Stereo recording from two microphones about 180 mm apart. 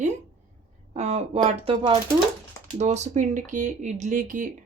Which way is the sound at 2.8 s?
40° right (ahead or behind).